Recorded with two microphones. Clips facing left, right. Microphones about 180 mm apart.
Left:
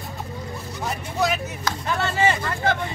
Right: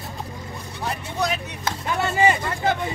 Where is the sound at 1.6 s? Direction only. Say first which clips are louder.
Right 1 dB; 15° right (ahead or behind).